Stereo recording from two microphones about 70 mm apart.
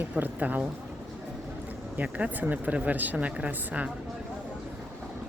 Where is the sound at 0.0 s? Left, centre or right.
Right.